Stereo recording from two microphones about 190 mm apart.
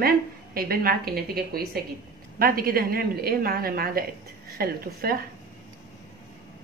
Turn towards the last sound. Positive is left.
turn(degrees=-50)  # may be behind; listen again after turning